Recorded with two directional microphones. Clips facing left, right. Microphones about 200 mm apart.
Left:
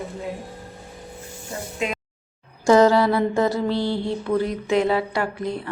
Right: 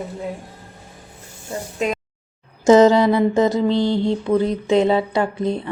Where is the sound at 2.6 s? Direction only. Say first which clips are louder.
Right 4 dB; 20° right (ahead or behind).